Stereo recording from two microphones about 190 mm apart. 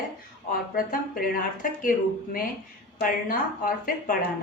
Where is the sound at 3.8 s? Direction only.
50° left (ahead or behind).